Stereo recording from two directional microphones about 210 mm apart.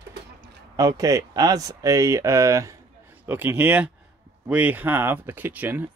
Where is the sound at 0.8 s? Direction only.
15° right (ahead or behind).